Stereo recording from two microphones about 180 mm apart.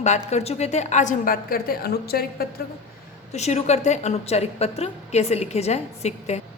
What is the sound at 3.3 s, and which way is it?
A woman's voice, 40° left (ahead or behind).